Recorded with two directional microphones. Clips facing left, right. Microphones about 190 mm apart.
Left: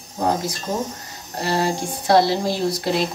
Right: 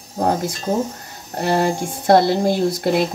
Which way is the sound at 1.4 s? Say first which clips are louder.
Right 3 dB; 50° right (ahead or behind).